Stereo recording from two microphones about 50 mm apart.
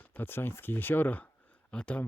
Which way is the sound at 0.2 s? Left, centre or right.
Left.